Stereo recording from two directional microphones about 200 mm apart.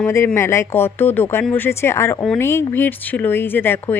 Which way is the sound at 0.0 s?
10° left (ahead or behind).